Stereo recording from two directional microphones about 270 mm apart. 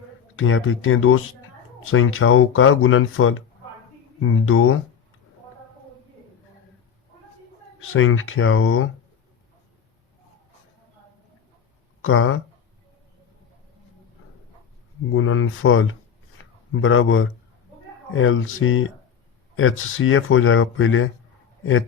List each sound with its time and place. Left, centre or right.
0.3 s speech: left
7.8 s speech: left
12.0 s speech: left
15.1 s speech: left
16.4 s a sound: left
16.7 s a man's voice: left